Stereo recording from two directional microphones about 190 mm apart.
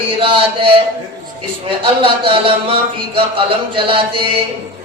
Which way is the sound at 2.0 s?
30° right (ahead or behind).